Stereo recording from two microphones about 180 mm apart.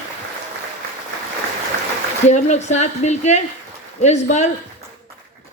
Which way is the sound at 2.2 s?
40° left (ahead or behind).